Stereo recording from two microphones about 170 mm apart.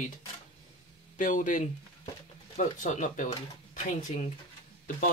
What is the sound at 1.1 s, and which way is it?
Speech, 50° left (ahead or behind).